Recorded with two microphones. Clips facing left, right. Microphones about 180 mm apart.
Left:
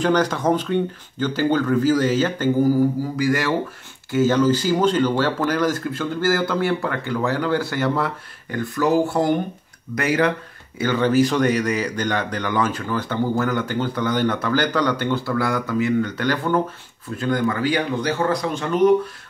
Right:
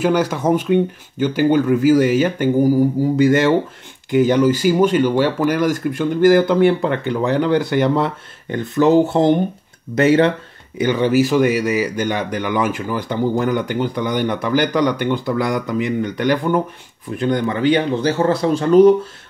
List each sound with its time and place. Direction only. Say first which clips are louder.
0.0 s speech: right 2 dB; 10° right (ahead or behind); by 10.3 s 25° right (ahead or behind)
10.8 s speech: right 2 dB; 15° right (ahead or behind); by 18.9 s 35° right (ahead or behind)